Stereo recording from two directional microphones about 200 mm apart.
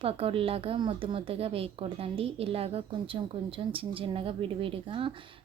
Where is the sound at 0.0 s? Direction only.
30° right (ahead or behind).